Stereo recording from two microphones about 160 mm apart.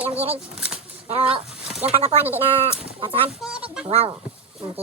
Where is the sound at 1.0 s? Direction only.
40° right (ahead or behind).